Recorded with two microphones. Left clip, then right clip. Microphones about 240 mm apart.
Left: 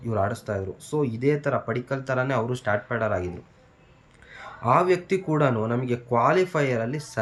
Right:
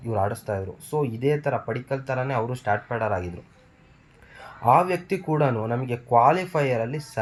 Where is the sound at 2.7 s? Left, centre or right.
Left.